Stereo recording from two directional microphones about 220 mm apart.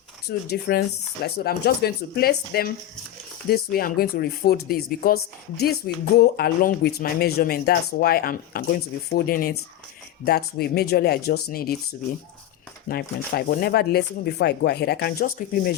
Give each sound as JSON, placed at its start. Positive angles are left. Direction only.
{"t": 0.3, "sound": "speech", "side_deg": 45}
{"t": 12.9, "sound": "speech", "side_deg": 45}